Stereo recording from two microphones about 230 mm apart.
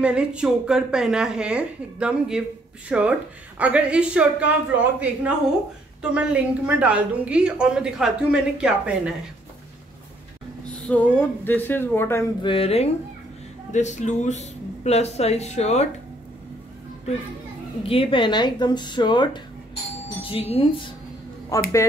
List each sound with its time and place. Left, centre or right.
0.0 s a woman's voice: centre
10.7 s speech: centre
12.4 s speech: left
17.8 s speech: left